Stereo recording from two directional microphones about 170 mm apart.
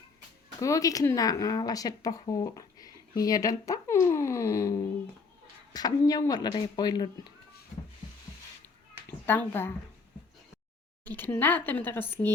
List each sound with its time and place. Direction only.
0.6 s speech: 20° left (ahead or behind)
9.0 s a child's voice: 10° left (ahead or behind)
11.0 s speech: 10° left (ahead or behind)